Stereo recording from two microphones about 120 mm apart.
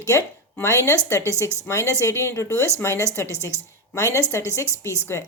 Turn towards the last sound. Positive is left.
turn(degrees=25)  # may be behind; listen again after turning